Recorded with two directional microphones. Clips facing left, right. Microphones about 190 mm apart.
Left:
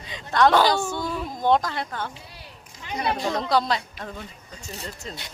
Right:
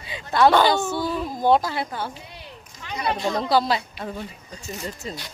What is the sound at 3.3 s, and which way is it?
Speech, 5° right (ahead or behind).